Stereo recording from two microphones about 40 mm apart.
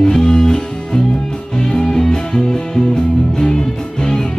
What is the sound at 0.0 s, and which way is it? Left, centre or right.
Music, centre.